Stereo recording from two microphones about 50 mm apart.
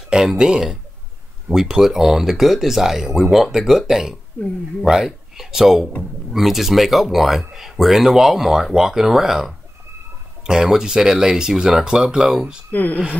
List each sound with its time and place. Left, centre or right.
0.1 s speech: centre
12.7 s speech: left